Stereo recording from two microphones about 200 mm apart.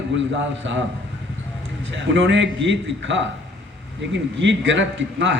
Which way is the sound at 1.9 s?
65° right (ahead or behind).